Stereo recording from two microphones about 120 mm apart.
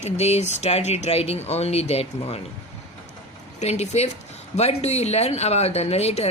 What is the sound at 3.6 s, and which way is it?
Speech, 65° left (ahead or behind).